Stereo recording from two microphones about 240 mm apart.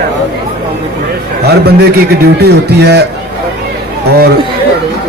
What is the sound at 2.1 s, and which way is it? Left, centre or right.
Speech, right.